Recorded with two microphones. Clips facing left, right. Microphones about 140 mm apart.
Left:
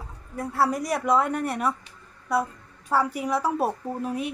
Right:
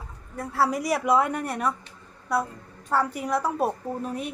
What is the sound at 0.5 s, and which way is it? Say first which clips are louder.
A woman's voice: right 1 dB; centre (ahead or behind).